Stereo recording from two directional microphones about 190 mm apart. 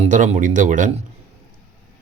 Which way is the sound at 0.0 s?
40° right (ahead or behind).